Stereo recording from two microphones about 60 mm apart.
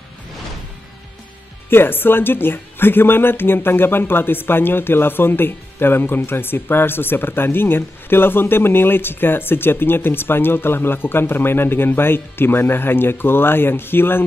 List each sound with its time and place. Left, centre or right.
1.7 s speech: left